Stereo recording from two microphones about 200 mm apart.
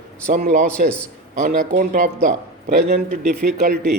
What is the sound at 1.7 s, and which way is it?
Speech, 40° right (ahead or behind).